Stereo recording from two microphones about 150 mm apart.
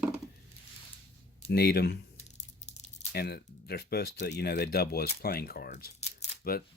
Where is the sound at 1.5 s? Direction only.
90° left.